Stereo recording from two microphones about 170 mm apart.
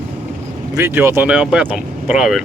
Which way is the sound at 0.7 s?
15° right (ahead or behind).